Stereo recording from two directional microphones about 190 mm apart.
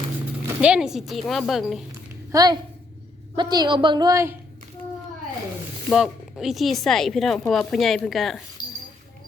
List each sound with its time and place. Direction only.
0.4 s speech: 5° right (ahead or behind)
2.3 s a woman's voice: 20° right (ahead or behind)
5.9 s speech: 5° right (ahead or behind)